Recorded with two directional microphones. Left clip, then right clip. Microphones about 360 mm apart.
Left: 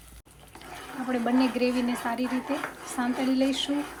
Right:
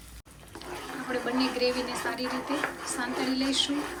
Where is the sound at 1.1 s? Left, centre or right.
Centre.